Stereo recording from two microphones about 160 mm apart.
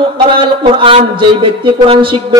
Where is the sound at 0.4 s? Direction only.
35° right (ahead or behind).